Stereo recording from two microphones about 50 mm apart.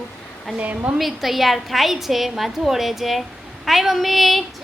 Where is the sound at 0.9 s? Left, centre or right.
Centre.